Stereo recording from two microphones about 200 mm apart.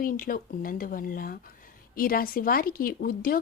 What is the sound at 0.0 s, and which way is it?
Speech, 45° left (ahead or behind).